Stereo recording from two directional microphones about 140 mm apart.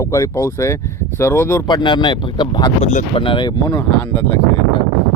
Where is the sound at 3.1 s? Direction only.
35° left (ahead or behind).